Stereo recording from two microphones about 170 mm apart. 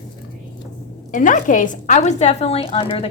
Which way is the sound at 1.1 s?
50° left (ahead or behind).